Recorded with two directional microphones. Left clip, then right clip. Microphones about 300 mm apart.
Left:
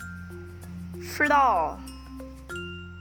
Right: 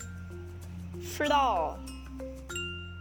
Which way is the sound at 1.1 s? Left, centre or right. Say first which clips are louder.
Left 5 dB; left.